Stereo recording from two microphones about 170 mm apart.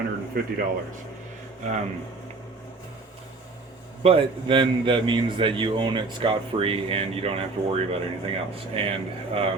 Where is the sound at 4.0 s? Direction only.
30° right (ahead or behind).